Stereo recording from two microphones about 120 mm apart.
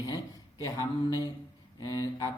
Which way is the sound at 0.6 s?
30° left (ahead or behind).